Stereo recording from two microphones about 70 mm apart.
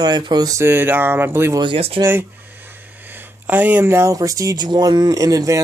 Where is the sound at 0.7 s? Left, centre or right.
Right.